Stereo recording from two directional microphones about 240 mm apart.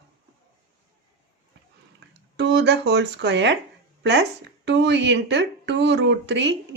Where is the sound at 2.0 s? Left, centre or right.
Right.